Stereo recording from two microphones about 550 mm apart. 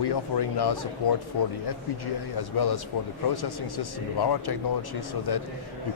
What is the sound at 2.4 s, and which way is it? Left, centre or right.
Speech, left.